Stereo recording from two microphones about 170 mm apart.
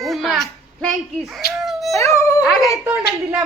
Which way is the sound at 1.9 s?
20° left (ahead or behind).